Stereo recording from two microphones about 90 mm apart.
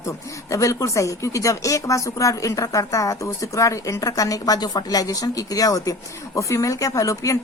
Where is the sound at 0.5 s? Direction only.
35° left (ahead or behind).